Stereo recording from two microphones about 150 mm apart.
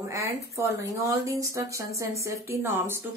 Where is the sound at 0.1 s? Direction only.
20° right (ahead or behind).